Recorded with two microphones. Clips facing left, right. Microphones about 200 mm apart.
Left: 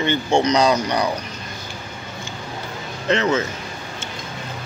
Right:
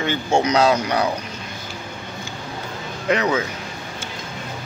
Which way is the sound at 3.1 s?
10° right (ahead or behind).